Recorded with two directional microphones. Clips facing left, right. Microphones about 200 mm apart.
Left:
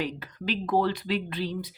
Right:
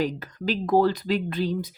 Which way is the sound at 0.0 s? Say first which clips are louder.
Right 5 dB; 45° right (ahead or behind).